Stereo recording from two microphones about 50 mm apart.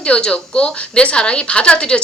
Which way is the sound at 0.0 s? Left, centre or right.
Centre.